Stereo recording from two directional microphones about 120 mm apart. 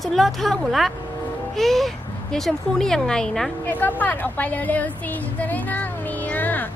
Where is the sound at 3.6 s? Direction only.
15° left (ahead or behind).